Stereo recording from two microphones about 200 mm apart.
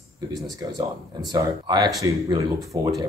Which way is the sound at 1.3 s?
20° right (ahead or behind).